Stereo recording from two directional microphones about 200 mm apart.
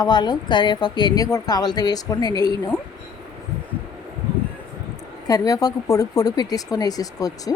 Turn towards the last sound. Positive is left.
turn(degrees=20)  # may be behind; listen again after turning